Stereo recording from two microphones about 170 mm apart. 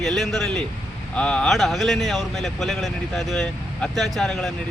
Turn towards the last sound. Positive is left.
turn(degrees=0)  # may be behind; listen again after turning